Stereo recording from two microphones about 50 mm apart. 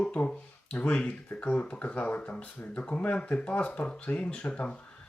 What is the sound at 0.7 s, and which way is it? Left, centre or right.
Speech, left.